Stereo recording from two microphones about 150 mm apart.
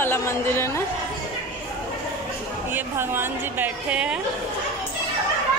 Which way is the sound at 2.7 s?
15° right (ahead or behind).